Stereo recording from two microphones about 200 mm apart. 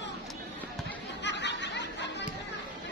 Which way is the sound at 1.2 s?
60° left (ahead or behind).